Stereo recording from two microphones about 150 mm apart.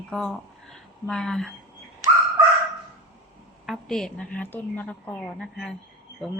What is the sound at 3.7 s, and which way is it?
A woman's voice, 5° left (ahead or behind).